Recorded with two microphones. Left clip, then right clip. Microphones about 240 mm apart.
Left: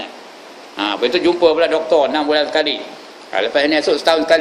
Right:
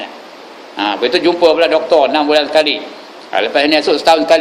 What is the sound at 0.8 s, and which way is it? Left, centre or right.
A man's voice, centre.